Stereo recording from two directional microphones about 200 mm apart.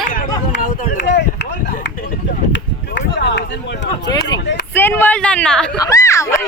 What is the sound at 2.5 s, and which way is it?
Run, 60° left (ahead or behind).